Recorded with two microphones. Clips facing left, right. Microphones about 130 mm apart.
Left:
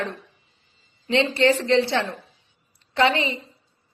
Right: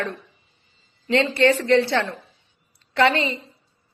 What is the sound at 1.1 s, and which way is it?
A woman's voice, 20° left (ahead or behind).